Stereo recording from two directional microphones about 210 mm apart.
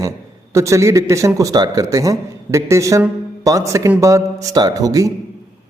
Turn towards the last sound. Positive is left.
turn(degrees=-15)  # may be behind; listen again after turning